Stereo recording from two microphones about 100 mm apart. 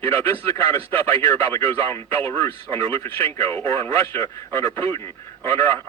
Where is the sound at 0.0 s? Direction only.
20° left (ahead or behind).